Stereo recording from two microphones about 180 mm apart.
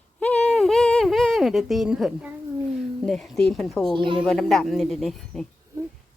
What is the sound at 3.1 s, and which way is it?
Speech, centre (ahead or behind).